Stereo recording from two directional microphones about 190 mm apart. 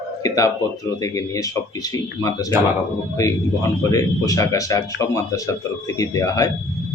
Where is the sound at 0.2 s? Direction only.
20° left (ahead or behind).